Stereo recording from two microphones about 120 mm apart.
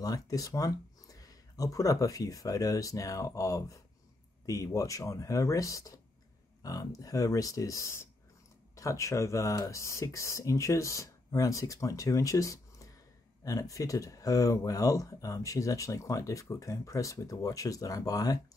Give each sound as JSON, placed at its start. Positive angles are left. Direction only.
{"t": 0.0, "sound": "speech", "side_deg": 30}